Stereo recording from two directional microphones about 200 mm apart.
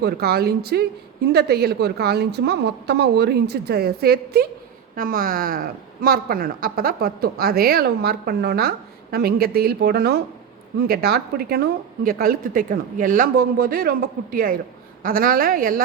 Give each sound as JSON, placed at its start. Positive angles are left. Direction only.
{"t": 0.0, "sound": "a woman's voice", "side_deg": -50}